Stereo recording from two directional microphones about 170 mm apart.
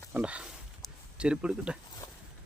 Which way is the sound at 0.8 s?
5° right (ahead or behind).